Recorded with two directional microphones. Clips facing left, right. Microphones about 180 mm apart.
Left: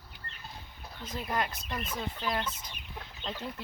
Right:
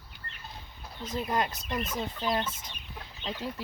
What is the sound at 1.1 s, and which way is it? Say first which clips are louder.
Speech: right 3 dB; 20° right (ahead or behind).